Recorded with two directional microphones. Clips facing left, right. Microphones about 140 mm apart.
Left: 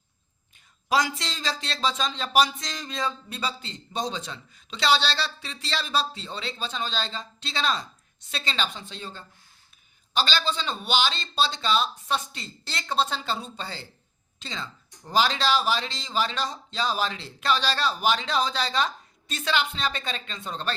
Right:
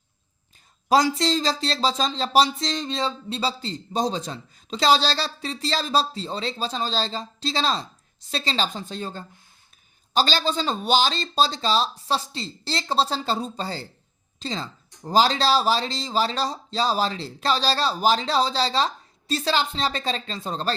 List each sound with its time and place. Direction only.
0.9 s speech: 35° right (ahead or behind)